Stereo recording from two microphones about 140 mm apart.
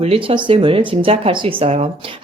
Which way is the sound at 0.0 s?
40° right (ahead or behind).